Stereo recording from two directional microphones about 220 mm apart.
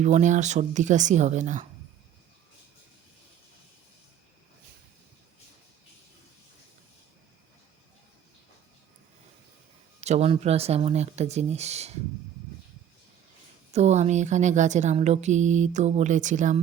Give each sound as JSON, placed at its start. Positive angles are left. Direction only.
{"t": 0.0, "sound": "speech", "side_deg": -35}
{"t": 10.0, "sound": "speech", "side_deg": -30}
{"t": 13.7, "sound": "speech", "side_deg": -30}